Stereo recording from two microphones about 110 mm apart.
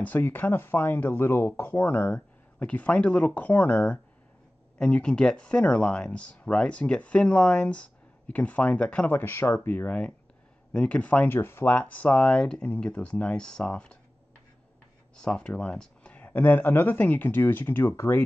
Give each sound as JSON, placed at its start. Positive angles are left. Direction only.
{"t": 0.0, "sound": "speech", "side_deg": 15}
{"t": 15.2, "sound": "speech", "side_deg": 10}